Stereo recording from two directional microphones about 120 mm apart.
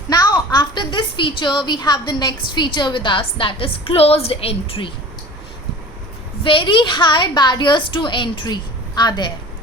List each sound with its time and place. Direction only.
0.1 s a woman's voice: 35° left (ahead or behind); by 4.9 s 50° left (ahead or behind)
6.4 s a woman's voice: 45° left (ahead or behind)